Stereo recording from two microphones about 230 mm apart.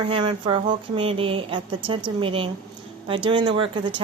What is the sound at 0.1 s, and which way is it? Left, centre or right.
Speech, right.